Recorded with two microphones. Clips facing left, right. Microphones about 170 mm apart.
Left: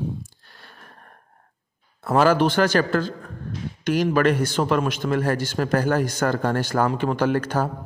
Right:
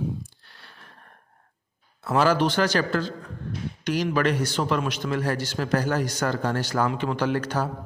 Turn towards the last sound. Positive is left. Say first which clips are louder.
# left 3 dB
turn(degrees=50)  # may be behind; listen again after turning